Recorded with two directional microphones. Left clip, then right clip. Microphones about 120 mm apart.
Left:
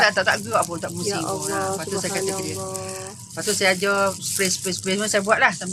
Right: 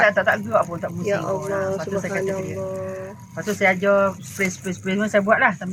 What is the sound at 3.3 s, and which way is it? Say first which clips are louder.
Speech: right 1 dB; 25° left (ahead or behind).